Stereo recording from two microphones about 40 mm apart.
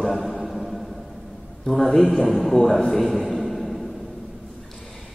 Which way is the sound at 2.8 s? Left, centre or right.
Centre.